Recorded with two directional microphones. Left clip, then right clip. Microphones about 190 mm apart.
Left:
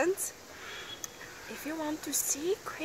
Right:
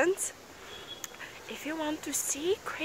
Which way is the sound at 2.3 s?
25° right (ahead or behind).